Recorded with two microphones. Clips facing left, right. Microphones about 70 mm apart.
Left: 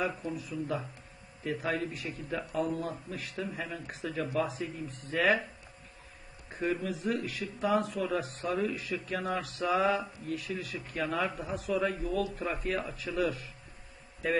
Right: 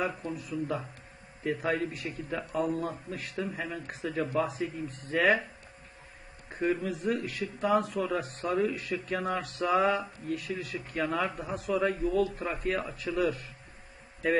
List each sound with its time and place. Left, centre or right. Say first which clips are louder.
0.0 s a man's voice: right 1 dB; centre
4.1 s speech: right 3 dB; right
4.4 s a man's voice: right 1 dB; centre
6.5 s a man's voice: right 3 dB; centre